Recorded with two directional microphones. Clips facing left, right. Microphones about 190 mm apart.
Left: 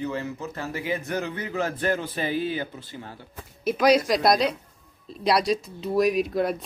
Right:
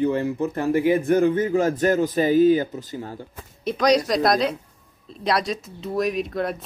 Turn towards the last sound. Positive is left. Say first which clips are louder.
# left 2 dB
turn(degrees=0)  # may be behind; listen again after turning